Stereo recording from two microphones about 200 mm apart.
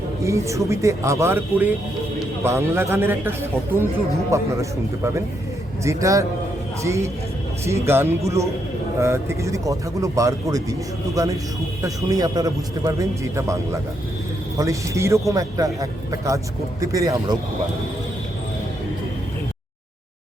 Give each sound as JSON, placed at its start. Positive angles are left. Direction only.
{"t": 0.2, "sound": "speech", "side_deg": -15}
{"t": 5.8, "sound": "speech", "side_deg": -15}
{"t": 14.6, "sound": "speech", "side_deg": -15}